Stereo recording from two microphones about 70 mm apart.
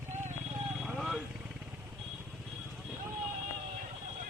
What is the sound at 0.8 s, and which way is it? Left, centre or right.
Vehicle, centre.